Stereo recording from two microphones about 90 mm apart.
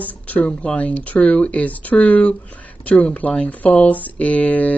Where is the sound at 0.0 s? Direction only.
15° left (ahead or behind).